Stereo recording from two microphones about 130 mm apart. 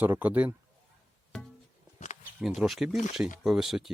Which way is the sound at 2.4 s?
5° right (ahead or behind).